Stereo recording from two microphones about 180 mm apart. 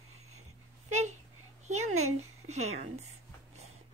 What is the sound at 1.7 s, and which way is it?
A woman's voice, 40° right (ahead or behind).